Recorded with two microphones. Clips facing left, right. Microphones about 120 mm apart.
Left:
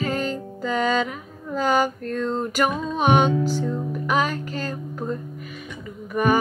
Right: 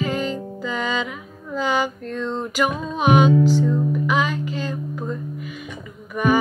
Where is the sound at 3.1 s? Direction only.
40° left (ahead or behind).